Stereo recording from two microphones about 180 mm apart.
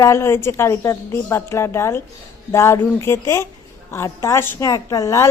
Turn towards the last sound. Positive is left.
turn(degrees=20)  # may be behind; listen again after turning